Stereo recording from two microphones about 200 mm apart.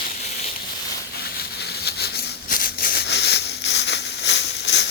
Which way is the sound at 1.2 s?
55° left (ahead or behind).